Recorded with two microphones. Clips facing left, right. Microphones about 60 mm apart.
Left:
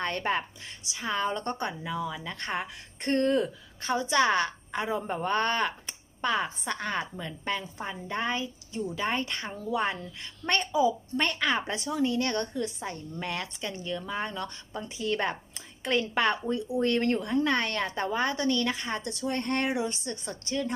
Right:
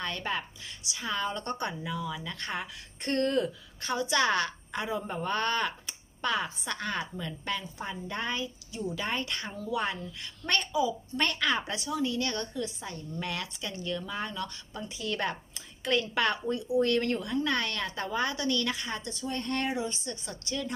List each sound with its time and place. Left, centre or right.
0.0 s a woman's voice: left
0.9 s a woman's voice: left
11.2 s a woman's voice: left
11.6 s a woman's voice: left
13.1 s a woman's voice: left
19.0 s a woman's voice: left